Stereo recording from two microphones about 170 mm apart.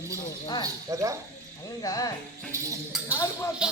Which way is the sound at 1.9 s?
20° left (ahead or behind).